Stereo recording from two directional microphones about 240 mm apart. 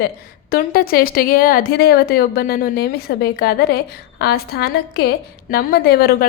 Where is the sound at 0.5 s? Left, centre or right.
Left.